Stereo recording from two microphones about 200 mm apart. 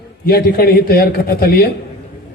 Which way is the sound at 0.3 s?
50° left (ahead or behind).